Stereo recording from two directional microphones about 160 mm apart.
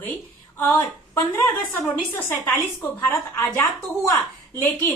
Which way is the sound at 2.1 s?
15° left (ahead or behind).